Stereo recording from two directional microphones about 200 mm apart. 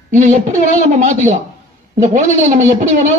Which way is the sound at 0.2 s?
35° right (ahead or behind).